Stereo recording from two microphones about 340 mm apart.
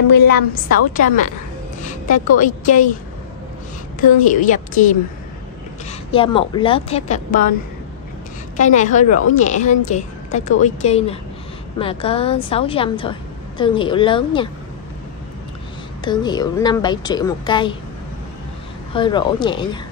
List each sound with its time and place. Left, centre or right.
0.3 s a woman's voice: left
4.3 s a woman's voice: left
8.5 s a woman's voice: left
16.0 s a woman's voice: centre
18.9 s a woman's voice: centre